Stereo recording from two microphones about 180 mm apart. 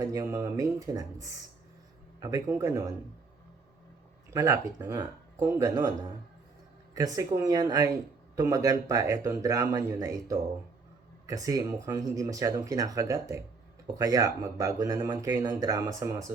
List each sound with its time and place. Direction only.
0.0 s speech: 20° right (ahead or behind)
4.3 s speech: 15° right (ahead or behind)